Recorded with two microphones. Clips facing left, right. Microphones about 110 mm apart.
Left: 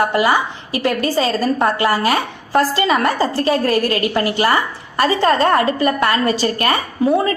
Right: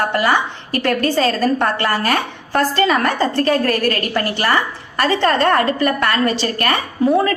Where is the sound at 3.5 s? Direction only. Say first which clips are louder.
Left 1 dB; 25° left (ahead or behind).